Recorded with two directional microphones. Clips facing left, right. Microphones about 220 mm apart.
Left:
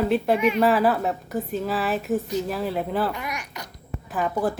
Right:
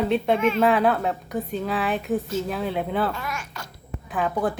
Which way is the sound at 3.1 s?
15° left (ahead or behind).